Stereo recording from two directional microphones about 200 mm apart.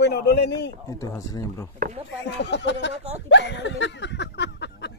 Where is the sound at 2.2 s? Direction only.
60° left (ahead or behind).